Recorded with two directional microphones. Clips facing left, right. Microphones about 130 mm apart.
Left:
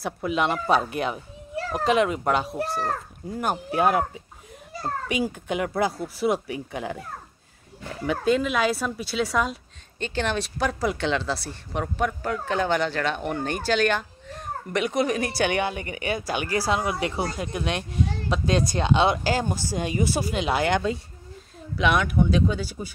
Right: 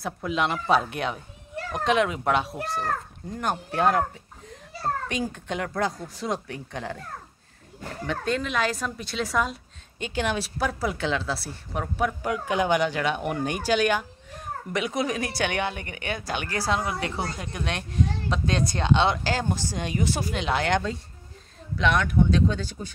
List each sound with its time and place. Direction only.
0.0 s speech: centre (ahead or behind)
8.1 s speech: 5° left (ahead or behind)